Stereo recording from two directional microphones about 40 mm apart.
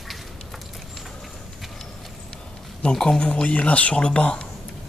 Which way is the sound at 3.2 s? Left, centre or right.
Left.